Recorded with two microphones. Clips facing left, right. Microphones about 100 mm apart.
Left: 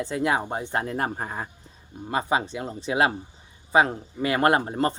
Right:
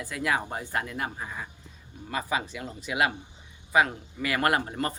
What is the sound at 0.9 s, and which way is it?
Speech, 45° left (ahead or behind).